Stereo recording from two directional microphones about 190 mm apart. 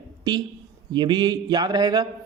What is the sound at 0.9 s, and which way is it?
A man's voice, 25° right (ahead or behind).